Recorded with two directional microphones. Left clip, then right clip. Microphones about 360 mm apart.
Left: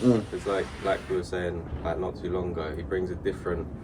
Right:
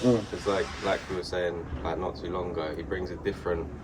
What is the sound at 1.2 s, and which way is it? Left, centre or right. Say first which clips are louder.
Speech: right 1 dB; centre.